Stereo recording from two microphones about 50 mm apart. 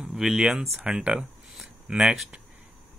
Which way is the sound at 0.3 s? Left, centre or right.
Centre.